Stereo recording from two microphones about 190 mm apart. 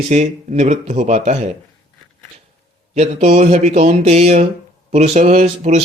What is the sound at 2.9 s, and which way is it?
Speech, 35° right (ahead or behind).